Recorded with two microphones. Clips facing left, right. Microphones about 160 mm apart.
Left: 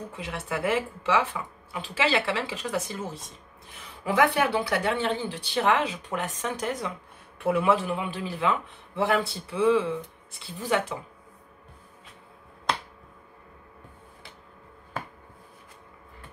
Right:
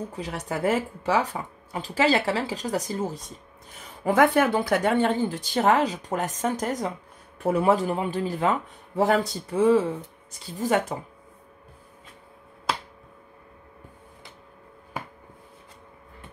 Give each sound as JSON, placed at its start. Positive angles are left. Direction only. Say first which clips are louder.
{"t": 0.1, "sound": "speech", "louder": "right 2 dB", "side_deg": -40}